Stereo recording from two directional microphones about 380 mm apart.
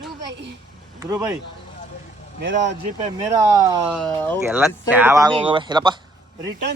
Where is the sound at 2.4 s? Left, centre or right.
Right.